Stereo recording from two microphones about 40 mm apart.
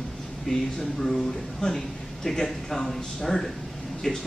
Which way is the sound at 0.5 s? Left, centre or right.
Centre.